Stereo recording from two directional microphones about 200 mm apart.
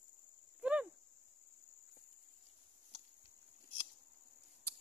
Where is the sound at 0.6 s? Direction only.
5° right (ahead or behind).